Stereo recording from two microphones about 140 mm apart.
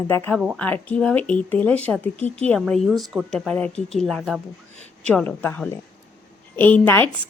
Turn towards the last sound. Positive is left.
turn(degrees=15)  # may be behind; listen again after turning